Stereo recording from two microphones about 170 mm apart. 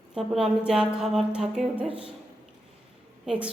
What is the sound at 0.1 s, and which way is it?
A woman's voice, 5° right (ahead or behind).